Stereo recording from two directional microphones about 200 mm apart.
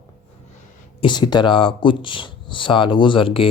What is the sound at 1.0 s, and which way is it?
Speech, 20° left (ahead or behind).